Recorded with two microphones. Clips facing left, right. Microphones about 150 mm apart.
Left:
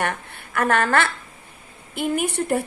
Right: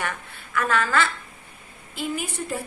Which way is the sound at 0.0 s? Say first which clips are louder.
Left 5 dB; 60° left (ahead or behind).